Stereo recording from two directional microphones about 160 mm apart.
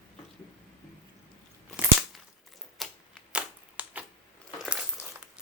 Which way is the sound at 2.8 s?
Centre (ahead or behind).